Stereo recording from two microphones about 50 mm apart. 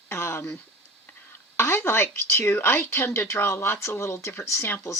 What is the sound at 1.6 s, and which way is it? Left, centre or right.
Speech, left.